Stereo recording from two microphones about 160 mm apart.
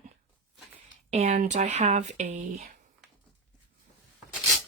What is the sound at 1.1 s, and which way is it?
Speech, 45° right (ahead or behind).